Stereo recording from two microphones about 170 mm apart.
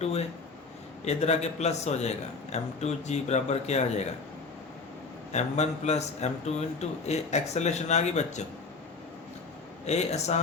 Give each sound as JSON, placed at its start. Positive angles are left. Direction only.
{"t": 0.0, "sound": "a man's voice", "side_deg": 40}
{"t": 5.3, "sound": "a man's voice", "side_deg": 40}
{"t": 9.8, "sound": "a man's voice", "side_deg": 40}